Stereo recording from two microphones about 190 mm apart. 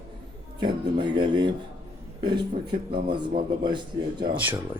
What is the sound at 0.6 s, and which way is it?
Speech, 25° right (ahead or behind).